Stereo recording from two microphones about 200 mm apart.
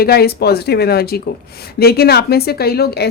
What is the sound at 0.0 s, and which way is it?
Speech, 50° left (ahead or behind).